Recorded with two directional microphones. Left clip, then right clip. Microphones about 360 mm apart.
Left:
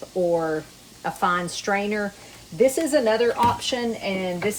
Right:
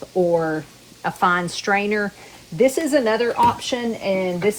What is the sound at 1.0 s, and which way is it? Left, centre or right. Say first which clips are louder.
Speech: right 4 dB; right.